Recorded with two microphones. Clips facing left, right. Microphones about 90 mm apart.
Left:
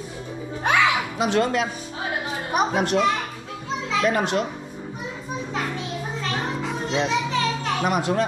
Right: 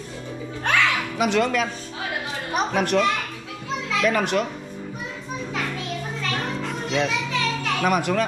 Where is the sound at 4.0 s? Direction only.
30° left (ahead or behind).